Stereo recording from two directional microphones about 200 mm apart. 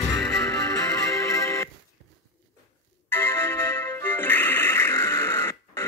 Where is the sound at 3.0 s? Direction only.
10° left (ahead or behind).